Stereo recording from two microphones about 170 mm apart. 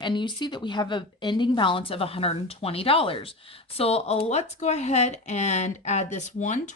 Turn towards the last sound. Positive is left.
turn(degrees=45)  # may be behind; listen again after turning